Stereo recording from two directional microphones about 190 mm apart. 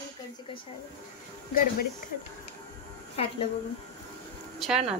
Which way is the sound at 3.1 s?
30° left (ahead or behind).